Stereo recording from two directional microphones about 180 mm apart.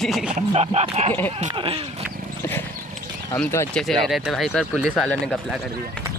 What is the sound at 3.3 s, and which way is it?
Speech, 15° left (ahead or behind).